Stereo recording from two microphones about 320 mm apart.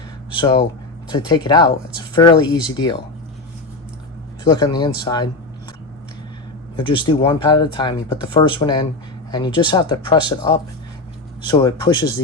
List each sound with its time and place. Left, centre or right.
0.3 s speech: centre
4.4 s speech: centre
6.7 s speech: centre